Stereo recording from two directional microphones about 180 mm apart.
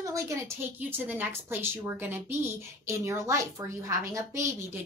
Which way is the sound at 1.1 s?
10° right (ahead or behind).